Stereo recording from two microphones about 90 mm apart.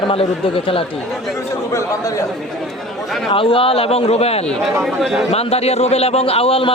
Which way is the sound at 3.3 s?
90° left.